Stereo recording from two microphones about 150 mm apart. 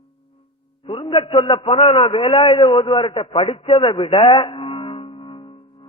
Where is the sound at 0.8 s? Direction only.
35° left (ahead or behind).